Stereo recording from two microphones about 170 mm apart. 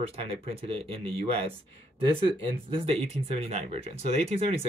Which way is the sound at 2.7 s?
35° right (ahead or behind).